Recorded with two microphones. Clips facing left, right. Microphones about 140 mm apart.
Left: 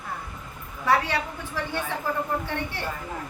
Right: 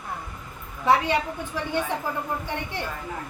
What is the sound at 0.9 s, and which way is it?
Speech, 20° right (ahead or behind).